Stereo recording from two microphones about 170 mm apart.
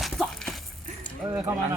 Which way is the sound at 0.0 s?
Centre (ahead or behind).